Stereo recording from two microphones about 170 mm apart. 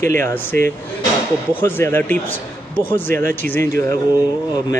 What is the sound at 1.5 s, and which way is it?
Speech, 15° left (ahead or behind).